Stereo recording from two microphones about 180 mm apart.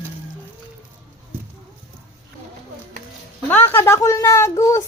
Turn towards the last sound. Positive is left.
turn(degrees=15)  # may be behind; listen again after turning